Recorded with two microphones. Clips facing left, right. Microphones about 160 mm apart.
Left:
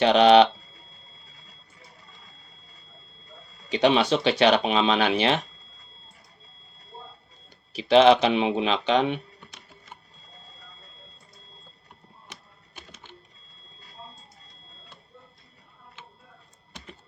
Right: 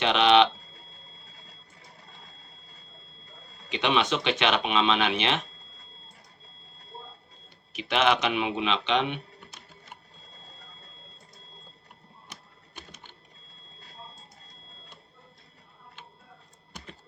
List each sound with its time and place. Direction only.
0.0 s speech: 40° left (ahead or behind)
3.7 s speech: 35° left (ahead or behind)
7.7 s speech: 30° left (ahead or behind)